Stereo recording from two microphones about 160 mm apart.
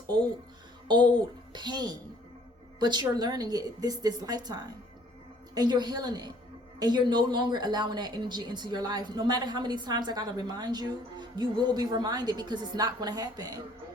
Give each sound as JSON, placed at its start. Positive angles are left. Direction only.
{"t": 0.9, "sound": "speech", "side_deg": -30}